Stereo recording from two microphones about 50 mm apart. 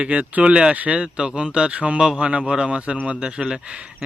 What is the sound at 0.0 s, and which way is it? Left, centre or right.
A man's voice, right.